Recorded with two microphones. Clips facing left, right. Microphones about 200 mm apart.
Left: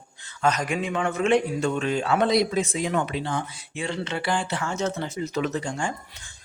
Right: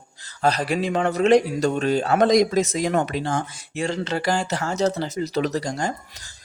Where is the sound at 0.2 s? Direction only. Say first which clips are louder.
Right 2 dB; 35° right (ahead or behind).